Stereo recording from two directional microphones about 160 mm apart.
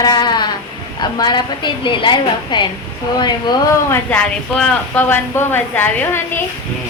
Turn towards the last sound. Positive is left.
turn(degrees=15)  # may be behind; listen again after turning